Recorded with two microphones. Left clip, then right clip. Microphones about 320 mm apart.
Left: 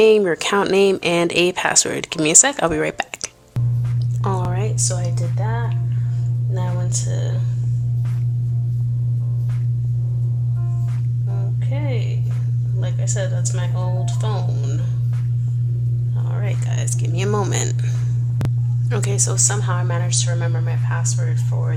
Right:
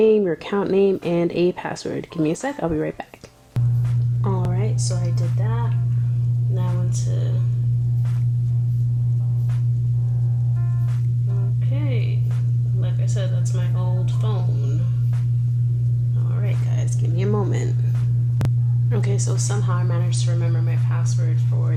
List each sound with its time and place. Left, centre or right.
0.0 s speech: left
4.2 s a sound: left
17.2 s speech: left
18.9 s speech: left